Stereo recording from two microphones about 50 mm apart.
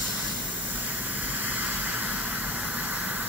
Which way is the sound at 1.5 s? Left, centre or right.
Right.